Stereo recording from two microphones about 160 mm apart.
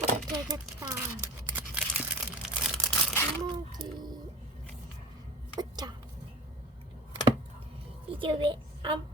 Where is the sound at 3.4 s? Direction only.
25° right (ahead or behind).